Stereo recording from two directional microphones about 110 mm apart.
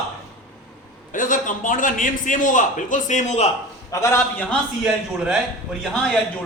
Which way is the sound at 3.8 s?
25° left (ahead or behind).